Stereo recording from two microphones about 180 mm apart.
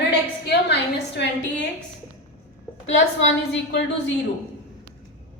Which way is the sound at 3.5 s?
70° left (ahead or behind).